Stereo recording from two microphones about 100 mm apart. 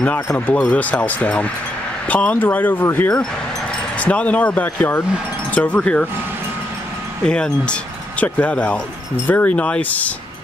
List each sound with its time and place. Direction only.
0.5 s speech: 15° left (ahead or behind)
7.2 s speech: 10° left (ahead or behind)